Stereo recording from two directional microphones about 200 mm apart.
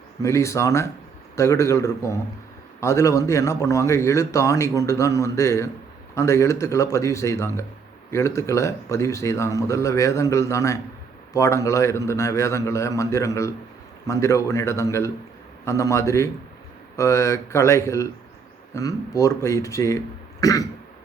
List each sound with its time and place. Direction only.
0.2 s a man's voice: 15° left (ahead or behind)